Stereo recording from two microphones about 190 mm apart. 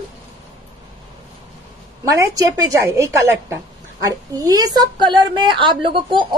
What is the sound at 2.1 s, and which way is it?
A woman's voice, 15° right (ahead or behind).